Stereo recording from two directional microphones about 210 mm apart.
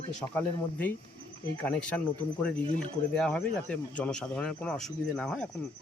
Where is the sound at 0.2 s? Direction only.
10° left (ahead or behind).